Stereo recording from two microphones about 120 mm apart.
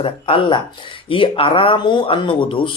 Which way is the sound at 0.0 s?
50° left (ahead or behind).